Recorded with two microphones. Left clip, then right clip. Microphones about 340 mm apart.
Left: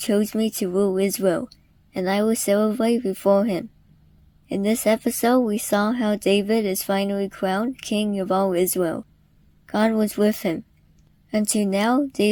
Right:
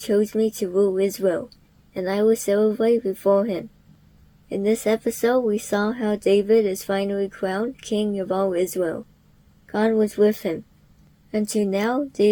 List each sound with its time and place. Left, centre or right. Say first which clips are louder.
0.0 s speech: right 2 dB; left